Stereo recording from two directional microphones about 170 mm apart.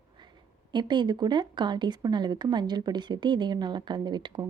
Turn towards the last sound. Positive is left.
turn(degrees=-25)  # may be behind; listen again after turning